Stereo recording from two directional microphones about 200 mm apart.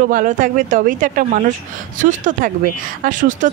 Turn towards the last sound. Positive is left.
turn(degrees=-40)  # may be behind; listen again after turning